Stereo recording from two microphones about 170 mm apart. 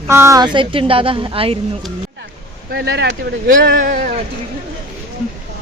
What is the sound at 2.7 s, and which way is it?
Speech, 75° right (ahead or behind).